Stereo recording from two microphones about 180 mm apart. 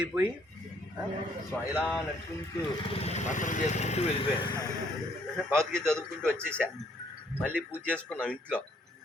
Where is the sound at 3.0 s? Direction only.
40° left (ahead or behind).